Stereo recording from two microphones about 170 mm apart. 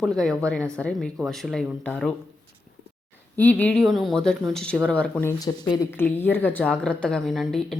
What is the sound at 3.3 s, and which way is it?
A woman's voice, 10° left (ahead or behind).